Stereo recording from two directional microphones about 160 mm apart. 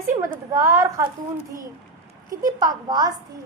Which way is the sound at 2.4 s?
25° right (ahead or behind).